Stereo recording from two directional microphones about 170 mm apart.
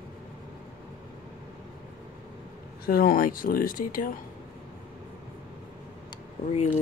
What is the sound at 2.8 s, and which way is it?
Speech, 60° left (ahead or behind).